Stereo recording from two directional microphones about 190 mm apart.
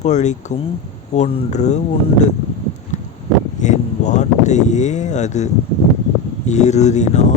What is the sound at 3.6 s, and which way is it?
Speech, 40° left (ahead or behind).